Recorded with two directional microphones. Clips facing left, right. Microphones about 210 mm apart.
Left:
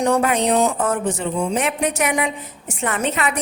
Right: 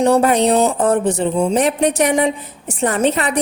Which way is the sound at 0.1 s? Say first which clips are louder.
Right 4 dB; 35° right (ahead or behind).